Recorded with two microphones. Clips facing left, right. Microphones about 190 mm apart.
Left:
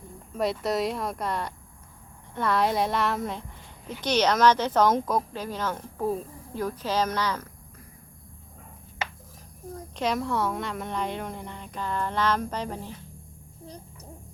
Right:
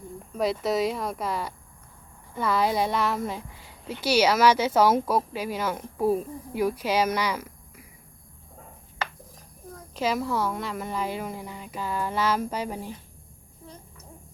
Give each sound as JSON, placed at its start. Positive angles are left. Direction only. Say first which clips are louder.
{"t": 0.3, "sound": "a woman's voice", "louder": "right 1 dB", "side_deg": 0}
{"t": 9.9, "sound": "a woman's voice", "louder": "right 1 dB", "side_deg": -5}
{"t": 13.7, "sound": "a sound", "louder": "left 2 dB", "side_deg": 35}